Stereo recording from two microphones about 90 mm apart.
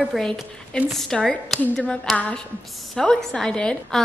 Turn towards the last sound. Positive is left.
turn(degrees=10)  # may be behind; listen again after turning